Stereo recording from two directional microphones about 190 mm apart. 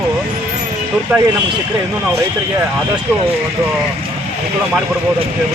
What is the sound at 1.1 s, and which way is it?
Speech, 5° right (ahead or behind).